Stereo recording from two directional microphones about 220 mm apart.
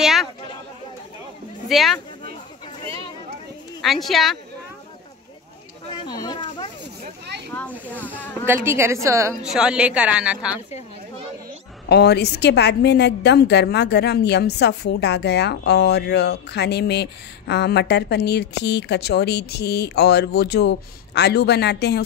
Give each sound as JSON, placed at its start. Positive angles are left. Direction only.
{"t": 0.0, "sound": "a woman's voice", "side_deg": 0}
{"t": 1.7, "sound": "a woman's voice", "side_deg": 0}
{"t": 3.8, "sound": "a woman's voice", "side_deg": 0}
{"t": 5.9, "sound": "a sound", "side_deg": 20}
{"t": 7.5, "sound": "a sound", "side_deg": 10}
{"t": 8.6, "sound": "a woman's voice", "side_deg": -10}
{"t": 9.4, "sound": "a woman's voice", "side_deg": -5}
{"t": 11.9, "sound": "a woman's voice", "side_deg": 50}